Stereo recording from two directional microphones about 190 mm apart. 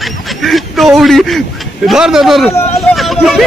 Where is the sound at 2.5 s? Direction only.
15° left (ahead or behind).